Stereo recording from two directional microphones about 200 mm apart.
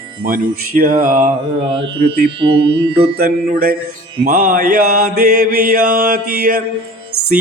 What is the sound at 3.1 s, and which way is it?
Mantra, 50° right (ahead or behind).